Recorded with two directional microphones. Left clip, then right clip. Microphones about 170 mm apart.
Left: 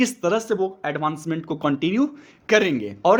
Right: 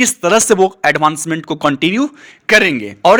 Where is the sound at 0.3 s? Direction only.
30° right (ahead or behind).